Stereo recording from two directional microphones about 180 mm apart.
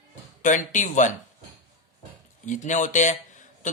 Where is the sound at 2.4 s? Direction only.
45° left (ahead or behind).